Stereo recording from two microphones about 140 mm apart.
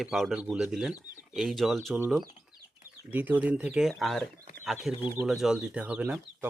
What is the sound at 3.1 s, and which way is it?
Speech, 15° right (ahead or behind).